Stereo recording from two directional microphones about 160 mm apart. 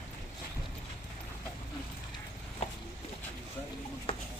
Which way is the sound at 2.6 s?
40° left (ahead or behind).